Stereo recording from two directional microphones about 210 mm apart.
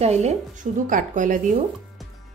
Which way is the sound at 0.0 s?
30° right (ahead or behind).